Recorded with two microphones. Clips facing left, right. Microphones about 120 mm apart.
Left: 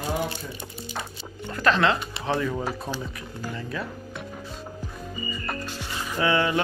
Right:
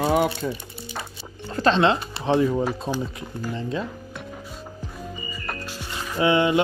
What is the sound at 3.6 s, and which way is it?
Speech, 25° right (ahead or behind).